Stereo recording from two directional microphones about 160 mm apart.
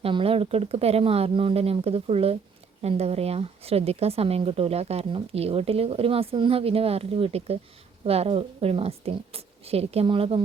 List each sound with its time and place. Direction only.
0.0 s speech: 35° right (ahead or behind)